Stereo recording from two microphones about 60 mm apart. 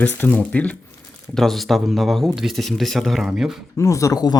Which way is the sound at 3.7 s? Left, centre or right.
Left.